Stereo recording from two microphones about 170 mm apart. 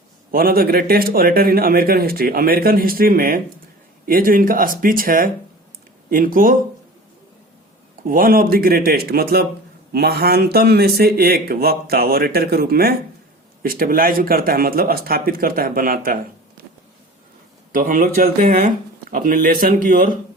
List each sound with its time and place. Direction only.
0.3 s a man's voice: 60° right (ahead or behind)
8.0 s a man's voice: 55° right (ahead or behind)
17.7 s a man's voice: 50° right (ahead or behind)